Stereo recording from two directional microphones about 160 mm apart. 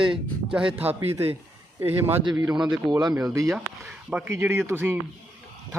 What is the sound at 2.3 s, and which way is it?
Speech, 25° right (ahead or behind).